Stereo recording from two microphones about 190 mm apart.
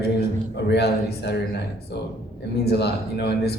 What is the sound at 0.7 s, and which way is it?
Speech, 60° left (ahead or behind).